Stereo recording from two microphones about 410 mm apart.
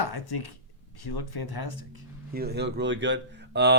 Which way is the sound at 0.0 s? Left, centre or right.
Left.